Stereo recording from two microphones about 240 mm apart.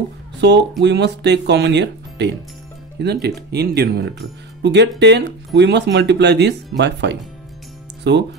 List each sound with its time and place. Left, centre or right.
0.4 s speech: right